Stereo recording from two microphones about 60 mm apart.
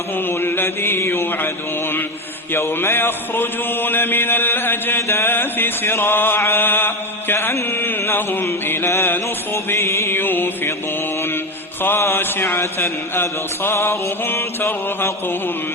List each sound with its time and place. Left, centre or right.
0.3 s mantra: left
2.5 s mantra: left
11.8 s mantra: left